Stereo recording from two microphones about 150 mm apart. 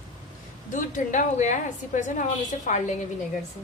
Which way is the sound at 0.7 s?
55° left (ahead or behind).